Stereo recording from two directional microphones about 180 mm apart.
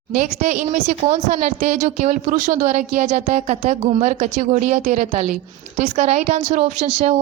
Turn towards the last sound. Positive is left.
turn(degrees=-40)  # may be behind; listen again after turning